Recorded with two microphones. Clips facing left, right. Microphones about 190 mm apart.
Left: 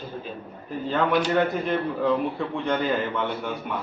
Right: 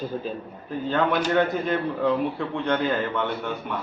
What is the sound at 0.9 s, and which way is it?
Speech, centre (ahead or behind).